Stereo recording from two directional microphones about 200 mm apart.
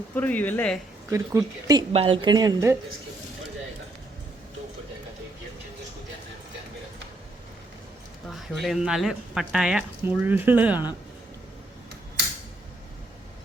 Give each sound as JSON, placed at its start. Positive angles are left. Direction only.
{"t": 0.1, "sound": "speech", "side_deg": 10}
{"t": 1.1, "sound": "speech", "side_deg": -15}
{"t": 1.9, "sound": "speech", "side_deg": -25}
{"t": 8.3, "sound": "speech", "side_deg": 0}